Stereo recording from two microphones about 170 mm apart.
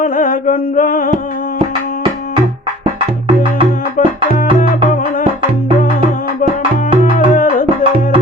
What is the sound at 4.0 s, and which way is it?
Music, 50° left (ahead or behind).